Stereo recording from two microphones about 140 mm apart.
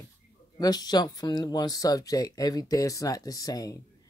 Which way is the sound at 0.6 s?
30° left (ahead or behind).